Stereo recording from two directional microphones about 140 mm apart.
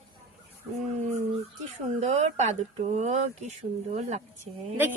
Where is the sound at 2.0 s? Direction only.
55° right (ahead or behind).